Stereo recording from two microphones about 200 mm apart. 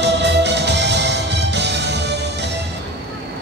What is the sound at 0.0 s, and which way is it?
Music, 60° right (ahead or behind).